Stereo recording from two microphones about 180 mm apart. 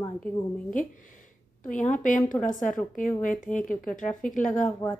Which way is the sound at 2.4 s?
45° left (ahead or behind).